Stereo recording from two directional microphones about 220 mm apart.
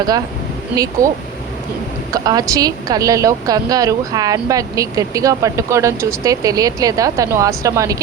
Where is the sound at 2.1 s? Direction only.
15° right (ahead or behind).